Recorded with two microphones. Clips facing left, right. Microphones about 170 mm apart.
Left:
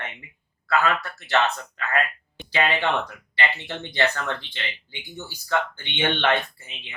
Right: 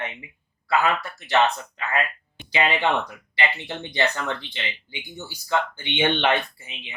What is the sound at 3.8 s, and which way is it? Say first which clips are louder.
Speech: even; 15° right (ahead or behind).